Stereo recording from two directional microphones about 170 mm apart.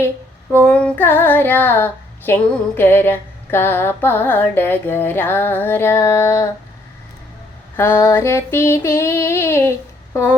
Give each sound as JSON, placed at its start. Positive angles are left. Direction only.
{"t": 0.6, "sound": "female singing", "side_deg": 5}
{"t": 7.8, "sound": "female singing", "side_deg": 15}